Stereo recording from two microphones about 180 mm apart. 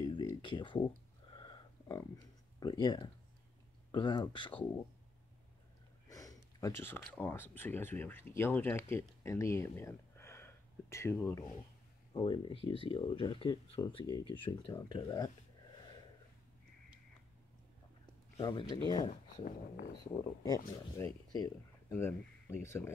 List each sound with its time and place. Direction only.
0.0 s a sound: 25° left (ahead or behind)
3.9 s speech: 25° left (ahead or behind)
6.0 s a sound: 20° left (ahead or behind)
7.2 s speech: 10° left (ahead or behind)
12.1 s speech: 25° left (ahead or behind)
18.4 s speech: 25° left (ahead or behind)
20.4 s speech: 15° left (ahead or behind)